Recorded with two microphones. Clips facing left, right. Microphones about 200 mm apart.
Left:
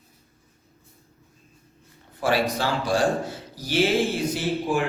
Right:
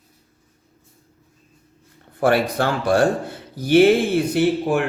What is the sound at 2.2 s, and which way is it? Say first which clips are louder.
Speech: right 5 dB; 55° right (ahead or behind).